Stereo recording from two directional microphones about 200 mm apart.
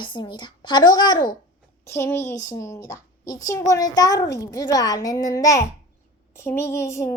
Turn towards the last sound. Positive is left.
turn(degrees=15)  # may be behind; listen again after turning